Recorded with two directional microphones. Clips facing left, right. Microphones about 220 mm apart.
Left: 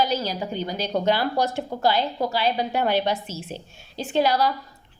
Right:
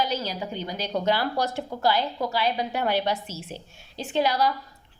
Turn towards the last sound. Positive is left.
turn(degrees=35)  # may be behind; listen again after turning